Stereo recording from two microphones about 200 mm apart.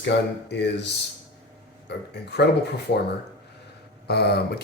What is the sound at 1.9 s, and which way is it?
Speech, 55° left (ahead or behind).